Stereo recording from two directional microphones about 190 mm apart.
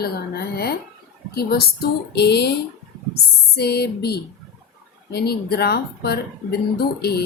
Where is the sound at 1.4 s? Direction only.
55° left (ahead or behind).